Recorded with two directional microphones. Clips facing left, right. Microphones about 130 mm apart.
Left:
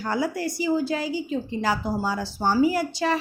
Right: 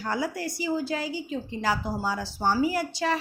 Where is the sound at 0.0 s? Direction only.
30° left (ahead or behind).